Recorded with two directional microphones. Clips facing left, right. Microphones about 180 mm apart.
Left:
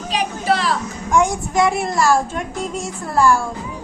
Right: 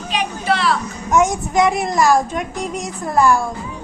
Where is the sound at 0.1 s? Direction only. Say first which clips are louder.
Left 1 dB; 35° left (ahead or behind).